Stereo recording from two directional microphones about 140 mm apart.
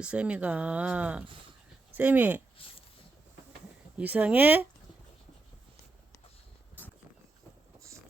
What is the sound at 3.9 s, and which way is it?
Speech, 10° right (ahead or behind).